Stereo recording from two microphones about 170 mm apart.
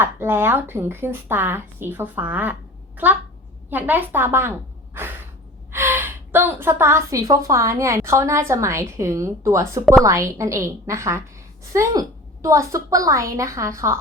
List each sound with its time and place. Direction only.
0.0 s a woman's voice: 15° right (ahead or behind)
3.7 s a woman's voice: 10° right (ahead or behind)
4.9 s a sound: 10° right (ahead or behind)
5.7 s a woman's voice: 15° right (ahead or behind)